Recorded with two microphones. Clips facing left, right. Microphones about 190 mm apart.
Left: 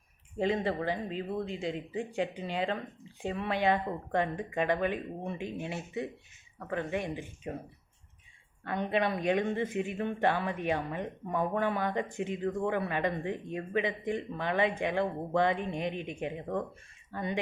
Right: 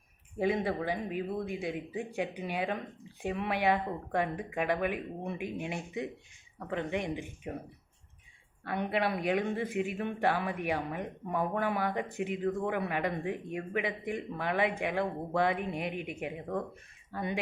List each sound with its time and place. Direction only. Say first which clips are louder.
0.3 s speech: even; 10° right (ahead or behind)
8.6 s speech: left 1 dB; 10° right (ahead or behind)